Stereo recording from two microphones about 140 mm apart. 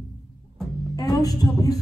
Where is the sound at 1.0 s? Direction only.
25° left (ahead or behind).